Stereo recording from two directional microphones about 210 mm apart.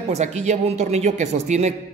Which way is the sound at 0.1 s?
35° right (ahead or behind).